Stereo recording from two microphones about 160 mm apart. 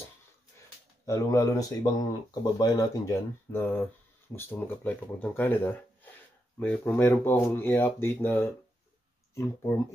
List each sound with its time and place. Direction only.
1.0 s speech: 20° left (ahead or behind)